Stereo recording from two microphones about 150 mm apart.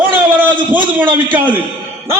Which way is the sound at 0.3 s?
10° right (ahead or behind).